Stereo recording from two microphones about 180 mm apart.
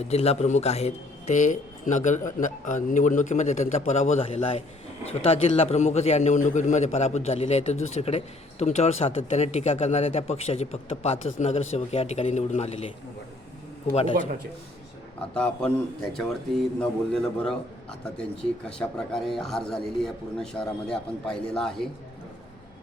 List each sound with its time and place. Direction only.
0.0 s a man's voice: 35° left (ahead or behind)
16.1 s a man's voice: 5° left (ahead or behind)
18.6 s a man's voice: 5° left (ahead or behind)